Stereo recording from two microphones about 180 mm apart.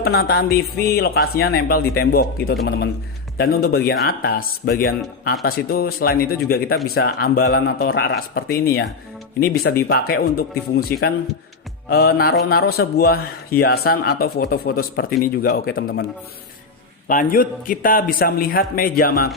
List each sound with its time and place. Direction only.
0.0 s speech: 60° left (ahead or behind)
11.9 s speech: 60° left (ahead or behind)
17.1 s a man's voice: 50° left (ahead or behind)